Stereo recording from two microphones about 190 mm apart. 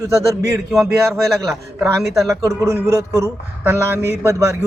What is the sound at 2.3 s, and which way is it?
A man's voice, 15° right (ahead or behind).